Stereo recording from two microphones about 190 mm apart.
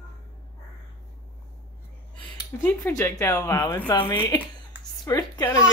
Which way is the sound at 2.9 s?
15° left (ahead or behind).